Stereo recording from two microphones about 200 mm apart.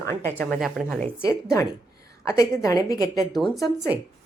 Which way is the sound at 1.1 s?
15° left (ahead or behind).